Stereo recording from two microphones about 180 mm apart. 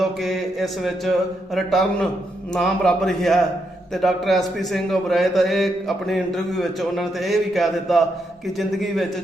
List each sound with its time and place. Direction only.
0.0 s a man's voice: centre (ahead or behind)